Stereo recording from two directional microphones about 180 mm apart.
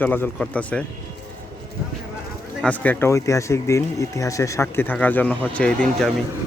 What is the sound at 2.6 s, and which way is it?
Speech, 10° left (ahead or behind).